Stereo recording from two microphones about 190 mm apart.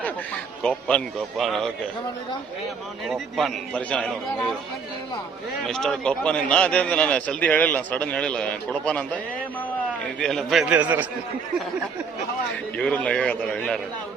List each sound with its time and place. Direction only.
0.6 s a man's voice: 5° left (ahead or behind)
3.1 s a man's voice: centre (ahead or behind)
5.6 s a man's voice: centre (ahead or behind)
10.2 s a man's voice: 5° left (ahead or behind)
12.7 s a man's voice: 5° left (ahead or behind)